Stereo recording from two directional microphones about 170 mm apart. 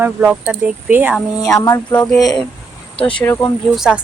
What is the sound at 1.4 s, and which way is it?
Speech, 20° left (ahead or behind).